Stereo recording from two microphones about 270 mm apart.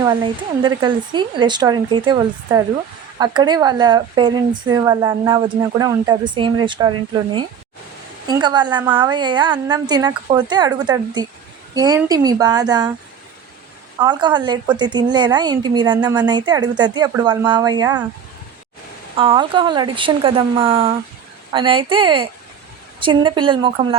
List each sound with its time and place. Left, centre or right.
0.0 s a woman's voice: centre
8.3 s a woman's voice: centre
14.0 s a woman's voice: centre
19.1 s a woman's voice: centre